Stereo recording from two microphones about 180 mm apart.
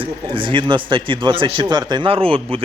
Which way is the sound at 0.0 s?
30° right (ahead or behind).